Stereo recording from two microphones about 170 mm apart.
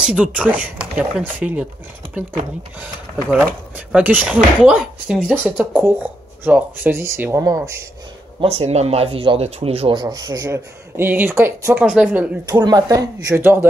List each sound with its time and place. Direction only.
0.0 s speech: 5° right (ahead or behind)
2.8 s speech: 10° right (ahead or behind)
8.4 s speech: 35° right (ahead or behind); by 12.3 s 10° right (ahead or behind)
12.4 s speech: 20° right (ahead or behind)